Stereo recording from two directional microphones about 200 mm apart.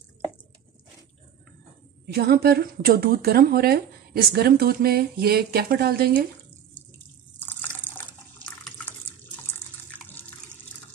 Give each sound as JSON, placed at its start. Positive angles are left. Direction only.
{"t": 2.0, "sound": "speech", "side_deg": -50}
{"t": 7.3, "sound": "water", "side_deg": 10}